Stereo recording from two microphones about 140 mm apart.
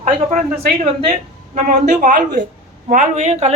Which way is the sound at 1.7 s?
60° right (ahead or behind).